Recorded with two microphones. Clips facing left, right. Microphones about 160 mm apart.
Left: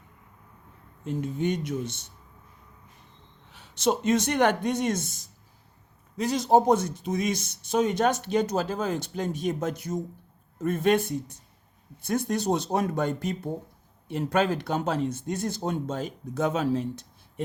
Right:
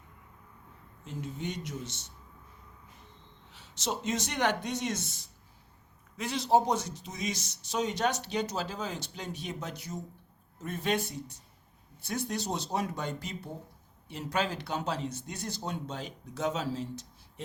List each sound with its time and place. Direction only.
1.0 s speech: 60° left (ahead or behind)
3.5 s speech: 55° left (ahead or behind)